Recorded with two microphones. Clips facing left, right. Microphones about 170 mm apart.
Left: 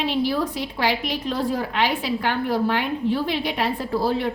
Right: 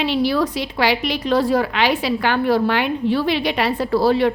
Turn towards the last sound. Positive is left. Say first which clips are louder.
# right 6 dB
turn(degrees=-85)